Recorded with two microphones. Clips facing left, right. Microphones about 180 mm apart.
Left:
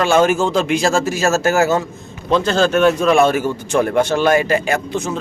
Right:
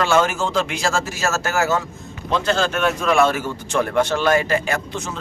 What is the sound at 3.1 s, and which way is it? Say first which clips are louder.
A man's voice: left 4 dB; 20° left (ahead or behind).